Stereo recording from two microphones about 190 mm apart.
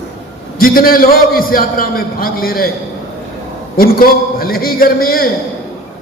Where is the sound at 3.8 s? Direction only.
50° left (ahead or behind).